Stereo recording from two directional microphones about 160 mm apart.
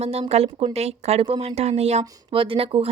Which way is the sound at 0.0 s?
40° right (ahead or behind).